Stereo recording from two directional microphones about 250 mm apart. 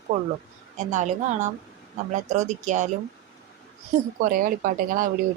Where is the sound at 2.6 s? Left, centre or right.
Right.